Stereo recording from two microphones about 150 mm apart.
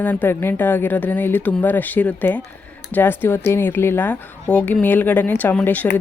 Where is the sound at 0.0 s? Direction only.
10° left (ahead or behind).